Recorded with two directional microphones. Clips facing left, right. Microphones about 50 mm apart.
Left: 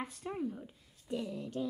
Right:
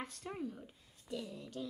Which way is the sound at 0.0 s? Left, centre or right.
Centre.